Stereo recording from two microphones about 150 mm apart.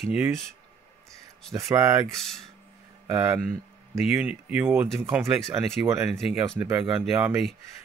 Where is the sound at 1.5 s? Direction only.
20° right (ahead or behind).